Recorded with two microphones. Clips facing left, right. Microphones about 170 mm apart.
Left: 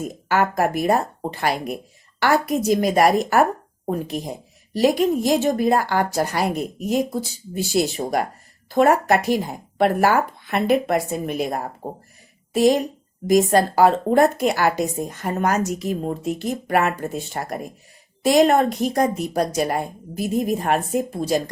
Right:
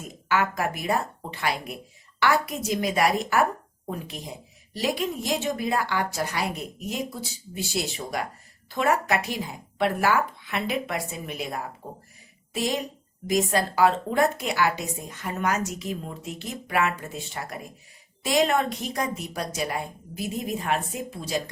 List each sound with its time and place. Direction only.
0.0 s a woman's voice: 45° left (ahead or behind)